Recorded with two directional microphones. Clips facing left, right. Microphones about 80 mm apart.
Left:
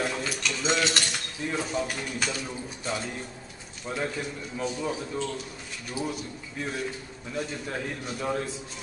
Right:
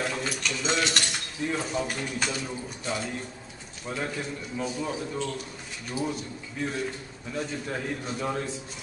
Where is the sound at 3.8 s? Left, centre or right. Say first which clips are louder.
Left 1 dB; centre.